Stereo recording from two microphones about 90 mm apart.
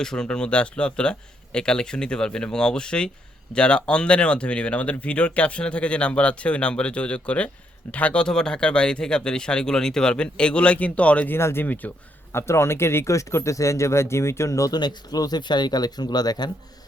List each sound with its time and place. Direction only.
0.0 s speech: 5° left (ahead or behind)
11.3 s speech: 25° left (ahead or behind)
12.3 s speech: 30° left (ahead or behind)
14.7 s speech: 50° left (ahead or behind)